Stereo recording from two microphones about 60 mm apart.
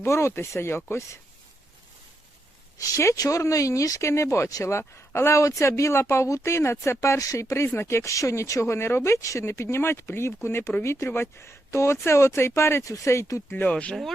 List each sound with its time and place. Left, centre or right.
0.0 s speech: left
2.7 s speech: left
7.5 s speech: left
8.6 s speech: left
9.4 s speech: left
12.8 s speech: left
13.7 s speech: left